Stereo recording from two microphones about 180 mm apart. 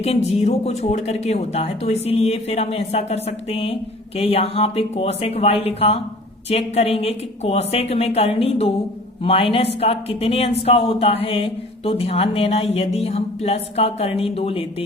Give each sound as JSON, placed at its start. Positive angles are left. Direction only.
{"t": 0.0, "sound": "speech", "side_deg": 35}